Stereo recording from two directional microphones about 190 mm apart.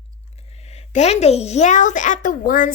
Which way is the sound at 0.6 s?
35° left (ahead or behind).